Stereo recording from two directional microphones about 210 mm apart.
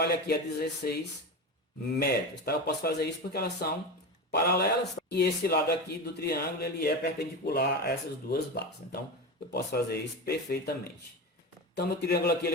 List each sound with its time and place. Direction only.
0.0 s speech: 50° left (ahead or behind)
2.0 s speech: 50° left (ahead or behind)